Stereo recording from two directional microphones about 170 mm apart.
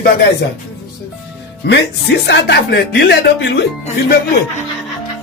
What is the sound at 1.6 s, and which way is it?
Speech, 80° left.